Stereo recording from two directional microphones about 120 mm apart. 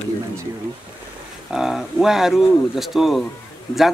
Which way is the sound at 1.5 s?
5° right (ahead or behind).